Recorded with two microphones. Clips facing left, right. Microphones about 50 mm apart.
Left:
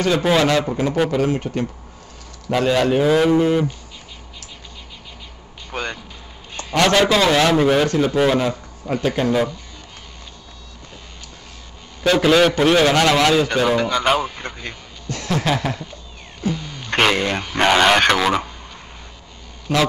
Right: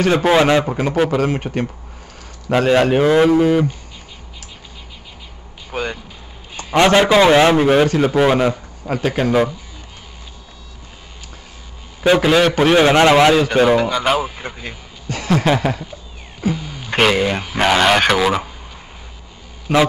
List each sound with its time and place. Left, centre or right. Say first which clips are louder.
0.0 s a man's voice: right 3 dB; right
1.3 s speech: right 1 dB; right
2.7 s speech: right 3 dB; right
3.3 s a man's voice: right 3 dB; centre
5.7 s vehicle: right 3 dB; centre
6.5 s a man's voice: right 4 dB; centre
12.0 s a man's voice: right 3 dB; centre
12.3 s a man's voice: left 3 dB; centre
12.5 s a man's voice: right 3 dB; centre
13.6 s speech: right 4 dB; centre